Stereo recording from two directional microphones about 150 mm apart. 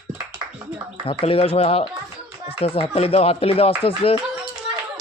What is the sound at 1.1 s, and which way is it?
A child's voice, 40° left (ahead or behind).